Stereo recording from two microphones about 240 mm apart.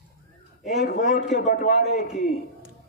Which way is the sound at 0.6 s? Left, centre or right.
Left.